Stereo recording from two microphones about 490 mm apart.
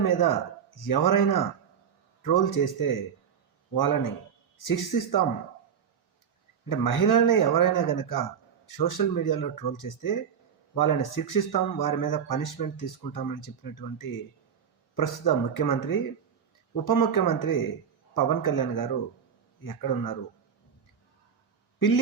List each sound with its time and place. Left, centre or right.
0.0 s speech: left
6.7 s speech: left